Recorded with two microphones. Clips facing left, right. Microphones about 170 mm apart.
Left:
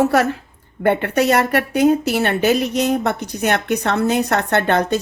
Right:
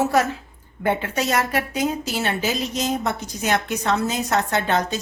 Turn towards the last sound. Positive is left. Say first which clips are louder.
# left 5 dB
turn(degrees=60)  # may be behind; listen again after turning